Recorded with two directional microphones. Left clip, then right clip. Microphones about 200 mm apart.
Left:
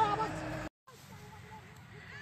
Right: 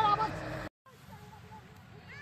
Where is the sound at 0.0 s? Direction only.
30° right (ahead or behind).